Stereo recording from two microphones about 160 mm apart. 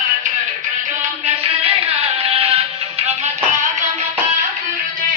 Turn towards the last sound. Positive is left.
turn(degrees=-40)  # may be behind; listen again after turning